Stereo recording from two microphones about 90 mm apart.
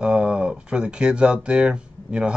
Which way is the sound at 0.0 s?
5° right (ahead or behind).